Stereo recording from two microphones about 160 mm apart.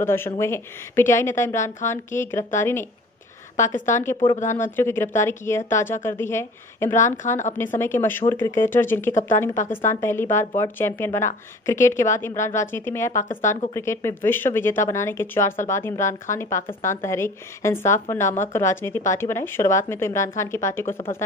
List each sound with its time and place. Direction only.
0.0 s a woman's voice: 15° left (ahead or behind)
7.2 s speech: 50° left (ahead or behind)
7.5 s speech: 15° left (ahead or behind)